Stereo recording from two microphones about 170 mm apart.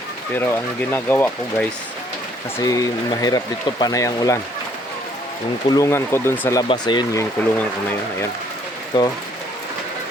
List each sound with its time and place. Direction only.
0.3 s speech: 15° left (ahead or behind)
5.6 s speech: 20° left (ahead or behind)
6.6 s speech: 25° left (ahead or behind)
8.9 s speech: 25° left (ahead or behind)